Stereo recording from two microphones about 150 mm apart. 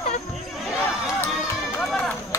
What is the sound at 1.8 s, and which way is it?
Speech, 5° left (ahead or behind).